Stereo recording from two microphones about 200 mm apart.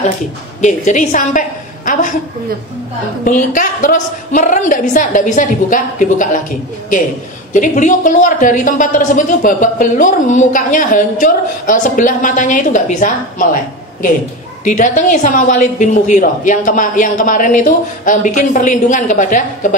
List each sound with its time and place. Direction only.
0.6 s a woman's voice: 35° left (ahead or behind)
3.3 s a woman's voice: 40° left (ahead or behind)
7.5 s a woman's voice: 40° left (ahead or behind)
14.6 s a woman's voice: 40° left (ahead or behind)